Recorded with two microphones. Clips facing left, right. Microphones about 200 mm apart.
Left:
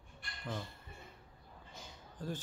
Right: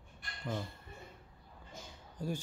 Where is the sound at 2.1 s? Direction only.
10° right (ahead or behind).